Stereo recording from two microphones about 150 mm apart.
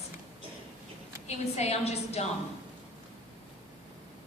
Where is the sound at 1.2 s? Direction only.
45° left (ahead or behind).